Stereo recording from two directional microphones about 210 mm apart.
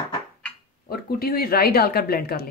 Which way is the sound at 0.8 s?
45° left (ahead or behind).